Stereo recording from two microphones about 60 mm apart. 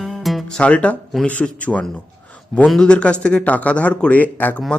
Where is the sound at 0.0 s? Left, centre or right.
Centre.